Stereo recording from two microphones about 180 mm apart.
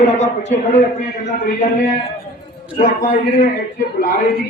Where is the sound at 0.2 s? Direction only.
40° left (ahead or behind).